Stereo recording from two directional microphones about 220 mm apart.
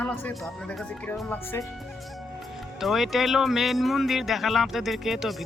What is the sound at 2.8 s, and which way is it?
Speech, centre (ahead or behind).